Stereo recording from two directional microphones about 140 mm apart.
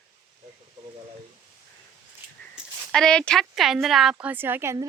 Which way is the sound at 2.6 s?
5° right (ahead or behind).